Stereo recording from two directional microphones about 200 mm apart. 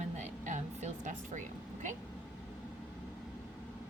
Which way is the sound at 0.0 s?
35° right (ahead or behind).